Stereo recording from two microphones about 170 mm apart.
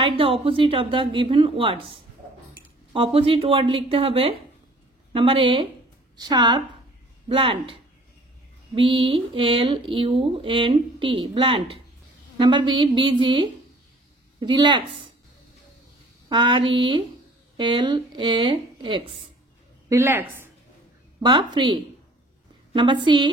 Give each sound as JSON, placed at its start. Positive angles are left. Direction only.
{"t": 0.0, "sound": "a woman's voice", "side_deg": -30}
{"t": 16.3, "sound": "a woman's voice", "side_deg": -30}
{"t": 19.9, "sound": "a woman's voice", "side_deg": -15}
{"t": 21.2, "sound": "a woman's voice", "side_deg": -25}